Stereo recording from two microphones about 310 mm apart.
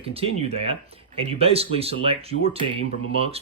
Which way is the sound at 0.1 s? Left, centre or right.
Centre.